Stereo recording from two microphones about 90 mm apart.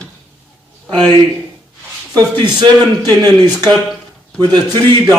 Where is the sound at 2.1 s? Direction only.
50° right (ahead or behind).